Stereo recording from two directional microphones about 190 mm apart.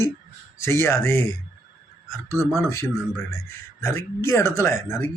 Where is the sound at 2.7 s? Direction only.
15° left (ahead or behind).